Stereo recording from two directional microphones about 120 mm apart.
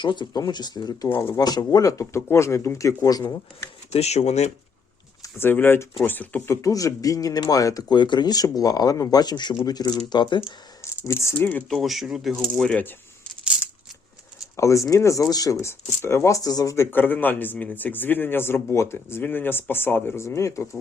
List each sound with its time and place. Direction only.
0.0 s speech: 40° left (ahead or behind)
1.1 s speech: 20° left (ahead or behind)
1.4 s speech: 35° left (ahead or behind)
3.9 s speech: 65° left (ahead or behind)
5.2 s speech: 15° left (ahead or behind); by 10.4 s 40° left (ahead or behind)
11.0 s speech: 25° left (ahead or behind)
11.8 s speech: centre (ahead or behind)
12.4 s speech: 10° left (ahead or behind)
14.5 s speech: 25° left (ahead or behind)